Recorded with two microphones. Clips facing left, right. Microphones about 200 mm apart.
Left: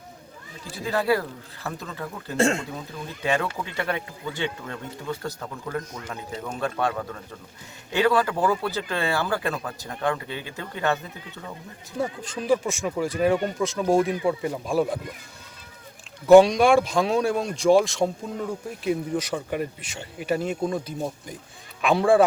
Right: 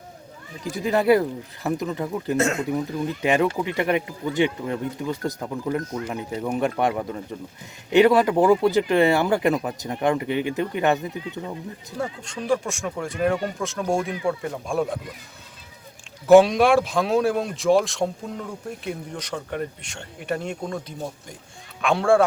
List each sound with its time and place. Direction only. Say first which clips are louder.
0.6 s speech: right 5 dB; 20° right (ahead or behind)
2.3 s speech: left 1 dB; 30° left (ahead or behind)
3.2 s speech: right 4 dB; 20° right (ahead or behind)
11.9 s speech: left 2 dB; 5° left (ahead or behind)
16.2 s a man's voice: even; centre (ahead or behind)